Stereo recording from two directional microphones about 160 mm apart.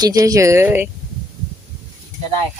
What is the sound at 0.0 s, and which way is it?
Speech, 20° right (ahead or behind).